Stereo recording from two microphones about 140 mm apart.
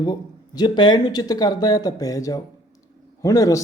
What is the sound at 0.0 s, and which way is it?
Speech, 30° left (ahead or behind).